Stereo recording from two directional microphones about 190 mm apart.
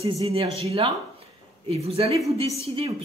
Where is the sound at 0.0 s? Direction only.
30° right (ahead or behind).